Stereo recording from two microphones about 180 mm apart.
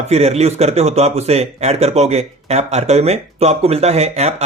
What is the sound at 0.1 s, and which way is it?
Speech, 35° right (ahead or behind).